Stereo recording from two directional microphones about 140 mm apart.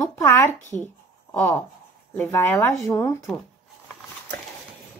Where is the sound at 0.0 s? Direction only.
20° left (ahead or behind).